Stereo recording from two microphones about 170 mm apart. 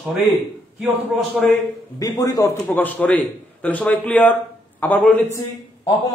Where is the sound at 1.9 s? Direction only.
20° left (ahead or behind).